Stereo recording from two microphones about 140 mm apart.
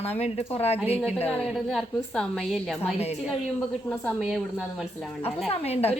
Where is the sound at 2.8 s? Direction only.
50° left (ahead or behind).